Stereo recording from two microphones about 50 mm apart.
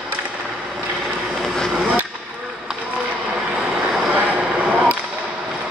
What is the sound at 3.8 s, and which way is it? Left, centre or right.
Vehicle, centre.